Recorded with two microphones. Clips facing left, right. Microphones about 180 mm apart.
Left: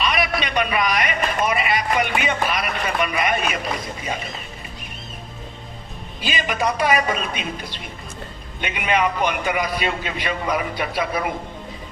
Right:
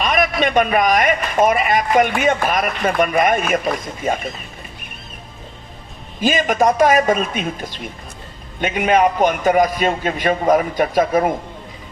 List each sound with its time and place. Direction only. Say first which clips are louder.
0.0 s a man's voice: right 5 dB; 45° right (ahead or behind)
6.1 s a man's voice: right 8 dB; 45° right (ahead or behind)